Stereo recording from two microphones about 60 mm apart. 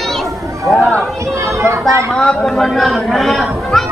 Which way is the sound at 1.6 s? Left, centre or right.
Right.